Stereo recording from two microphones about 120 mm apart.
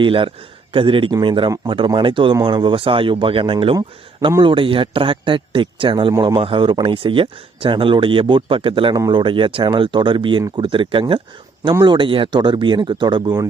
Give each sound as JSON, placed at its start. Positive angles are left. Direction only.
{"t": 0.0, "sound": "a man's voice", "side_deg": -45}